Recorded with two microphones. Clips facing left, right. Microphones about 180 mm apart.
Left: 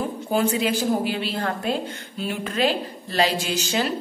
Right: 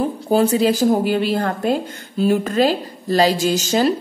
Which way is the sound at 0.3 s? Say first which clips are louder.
Right 6 dB; 35° right (ahead or behind).